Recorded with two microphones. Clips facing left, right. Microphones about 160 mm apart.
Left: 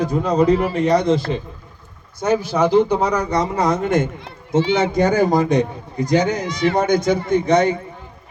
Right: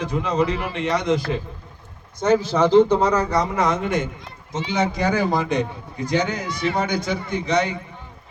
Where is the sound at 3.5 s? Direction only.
35° left (ahead or behind).